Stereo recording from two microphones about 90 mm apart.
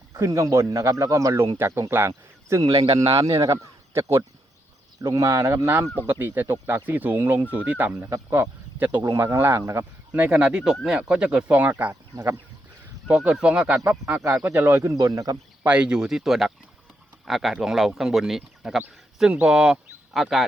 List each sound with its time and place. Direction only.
0.1 s speech: 35° right (ahead or behind)
1.5 s speech: 25° right (ahead or behind)
8.9 s speech: 55° right (ahead or behind)
9.1 s speech: 30° right (ahead or behind)
10.1 s speech: 15° right (ahead or behind)
13.1 s speech: 10° right (ahead or behind)
13.8 s speech: 25° right (ahead or behind)
14.9 s speech: 40° right (ahead or behind)
15.6 s speech: 10° right (ahead or behind)